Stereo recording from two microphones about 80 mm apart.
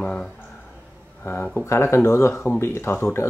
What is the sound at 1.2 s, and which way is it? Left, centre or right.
Speech, left.